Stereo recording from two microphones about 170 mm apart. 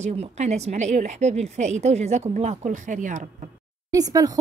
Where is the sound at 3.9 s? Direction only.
20° right (ahead or behind).